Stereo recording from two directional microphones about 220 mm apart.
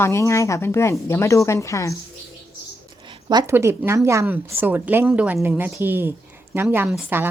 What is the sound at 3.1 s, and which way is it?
A woman's voice, 20° right (ahead or behind).